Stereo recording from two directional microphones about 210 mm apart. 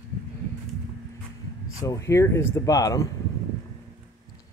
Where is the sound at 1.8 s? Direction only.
15° left (ahead or behind).